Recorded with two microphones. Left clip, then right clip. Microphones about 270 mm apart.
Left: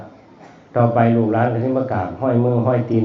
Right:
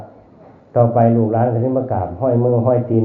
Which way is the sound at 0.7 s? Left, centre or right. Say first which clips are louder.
Right 2 dB; left.